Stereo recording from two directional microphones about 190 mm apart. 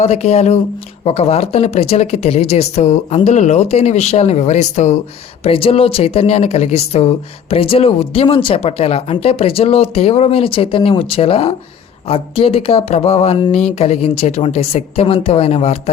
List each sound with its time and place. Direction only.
0.0 s speech: 35° left (ahead or behind)